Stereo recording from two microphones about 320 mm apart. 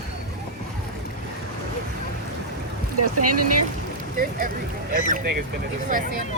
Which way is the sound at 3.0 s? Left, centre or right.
Right.